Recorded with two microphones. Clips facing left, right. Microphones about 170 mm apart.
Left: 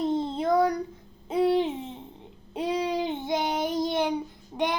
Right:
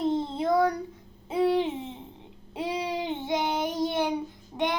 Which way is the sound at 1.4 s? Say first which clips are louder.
Left 1 dB; 15° left (ahead or behind).